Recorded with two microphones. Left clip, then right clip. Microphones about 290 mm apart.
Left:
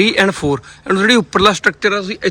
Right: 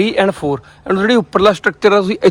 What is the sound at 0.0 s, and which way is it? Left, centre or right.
Speech, centre.